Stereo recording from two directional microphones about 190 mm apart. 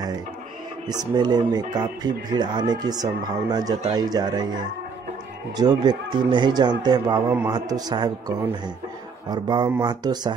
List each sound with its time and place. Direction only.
0.8 s speech: 20° right (ahead or behind)
5.6 s speech: 20° right (ahead or behind)